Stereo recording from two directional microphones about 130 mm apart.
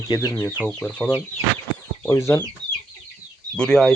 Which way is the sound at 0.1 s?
30° left (ahead or behind).